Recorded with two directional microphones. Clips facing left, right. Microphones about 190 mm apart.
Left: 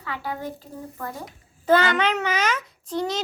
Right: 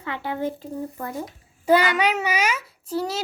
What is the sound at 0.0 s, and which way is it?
Speech, 25° right (ahead or behind).